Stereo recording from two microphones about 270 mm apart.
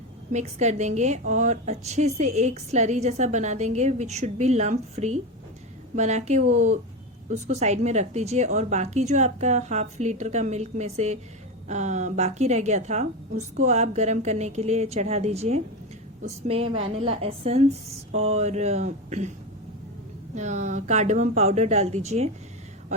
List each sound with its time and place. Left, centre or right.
0.3 s a woman's voice: right
20.3 s a woman's voice: right